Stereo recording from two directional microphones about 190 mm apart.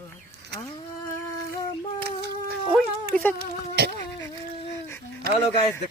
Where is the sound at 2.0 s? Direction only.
55° right (ahead or behind).